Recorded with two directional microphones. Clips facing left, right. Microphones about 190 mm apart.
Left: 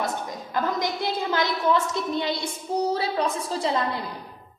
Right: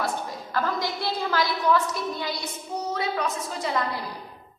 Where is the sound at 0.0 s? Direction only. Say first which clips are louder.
Even; 20° left (ahead or behind).